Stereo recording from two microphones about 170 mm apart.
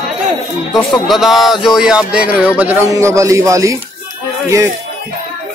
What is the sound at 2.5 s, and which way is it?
Speech, 15° right (ahead or behind).